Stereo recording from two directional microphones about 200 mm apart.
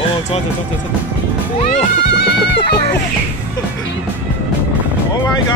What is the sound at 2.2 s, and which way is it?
Music, 60° left (ahead or behind).